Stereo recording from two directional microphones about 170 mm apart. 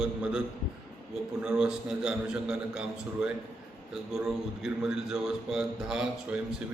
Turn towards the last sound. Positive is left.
turn(degrees=-5)  # may be behind; listen again after turning